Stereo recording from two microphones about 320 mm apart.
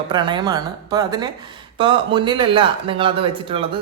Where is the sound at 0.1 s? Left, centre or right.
Centre.